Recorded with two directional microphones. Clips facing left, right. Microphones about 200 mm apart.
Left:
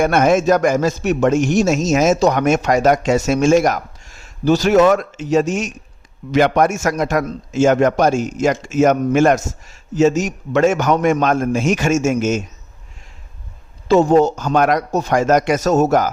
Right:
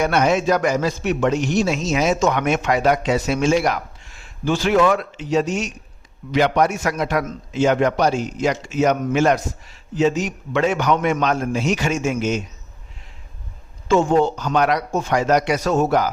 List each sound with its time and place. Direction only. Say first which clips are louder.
0.0 s a man's voice: left 4 dB; 50° left (ahead or behind)
13.8 s a man's voice: left 4 dB; 40° left (ahead or behind)